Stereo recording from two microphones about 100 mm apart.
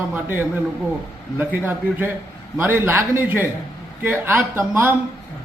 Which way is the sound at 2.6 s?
20° right (ahead or behind).